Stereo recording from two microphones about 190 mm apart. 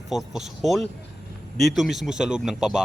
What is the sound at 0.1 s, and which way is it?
Speech, centre (ahead or behind).